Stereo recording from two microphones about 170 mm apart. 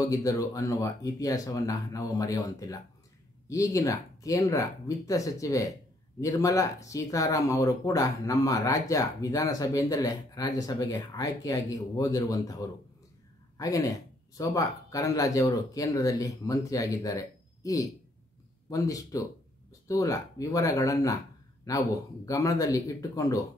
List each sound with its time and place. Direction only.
0.0 s speech: 20° left (ahead or behind)